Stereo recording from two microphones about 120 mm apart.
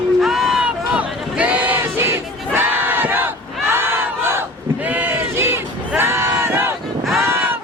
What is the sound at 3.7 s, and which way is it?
Battle cry, 20° right (ahead or behind).